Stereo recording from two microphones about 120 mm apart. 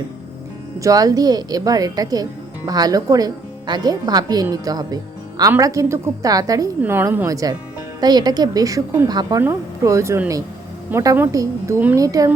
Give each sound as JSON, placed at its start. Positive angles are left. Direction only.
{"t": 0.8, "sound": "a woman's voice", "side_deg": -30}
{"t": 6.8, "sound": "a woman's voice", "side_deg": -20}
{"t": 7.3, "sound": "a woman's voice", "side_deg": -30}